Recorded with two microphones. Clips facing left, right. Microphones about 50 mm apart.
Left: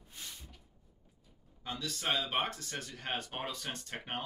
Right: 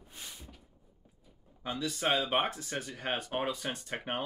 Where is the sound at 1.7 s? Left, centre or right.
Centre.